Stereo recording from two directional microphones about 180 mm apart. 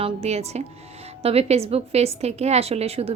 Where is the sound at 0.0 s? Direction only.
35° right (ahead or behind).